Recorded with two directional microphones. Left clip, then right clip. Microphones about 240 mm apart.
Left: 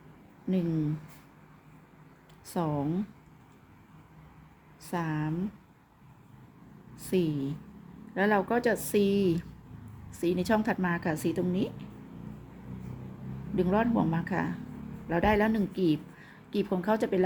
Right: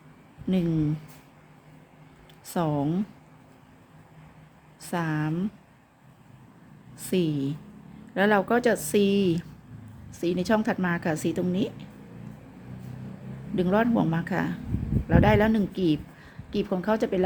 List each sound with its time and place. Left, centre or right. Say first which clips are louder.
0.4 s a woman's voice: right 4 dB; centre
2.5 s a woman's voice: right 4 dB; centre
4.8 s speech: right 4 dB; centre
7.0 s a woman's voice: right 3 dB; centre
13.6 s a woman's voice: right 3 dB; centre